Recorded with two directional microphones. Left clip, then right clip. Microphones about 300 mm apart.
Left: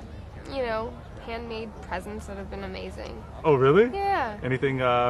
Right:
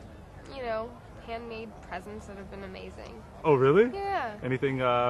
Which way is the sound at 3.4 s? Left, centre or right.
Centre.